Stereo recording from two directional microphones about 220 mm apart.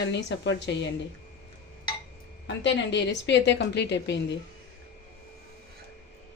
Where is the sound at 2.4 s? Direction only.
55° left (ahead or behind).